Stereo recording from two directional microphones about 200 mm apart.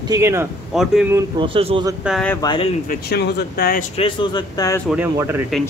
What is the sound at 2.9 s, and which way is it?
Speech, 55° left (ahead or behind).